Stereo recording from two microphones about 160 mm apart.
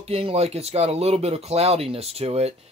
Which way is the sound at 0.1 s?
40° right (ahead or behind).